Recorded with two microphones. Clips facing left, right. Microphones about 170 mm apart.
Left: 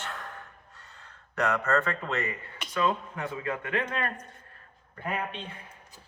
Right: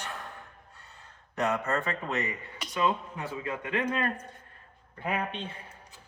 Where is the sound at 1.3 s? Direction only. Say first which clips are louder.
Left 2 dB; 15° right (ahead or behind).